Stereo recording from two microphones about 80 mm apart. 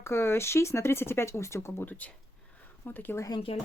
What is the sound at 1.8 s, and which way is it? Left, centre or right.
Speech, centre.